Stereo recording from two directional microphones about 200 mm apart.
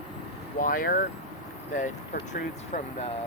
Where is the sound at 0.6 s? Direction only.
45° left (ahead or behind).